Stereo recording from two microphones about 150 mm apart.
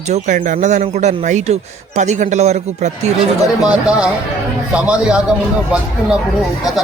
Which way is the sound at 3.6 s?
5° right (ahead or behind).